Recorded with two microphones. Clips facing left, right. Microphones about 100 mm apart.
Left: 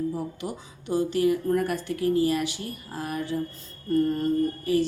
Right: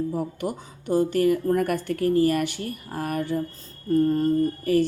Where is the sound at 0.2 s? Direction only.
50° right (ahead or behind).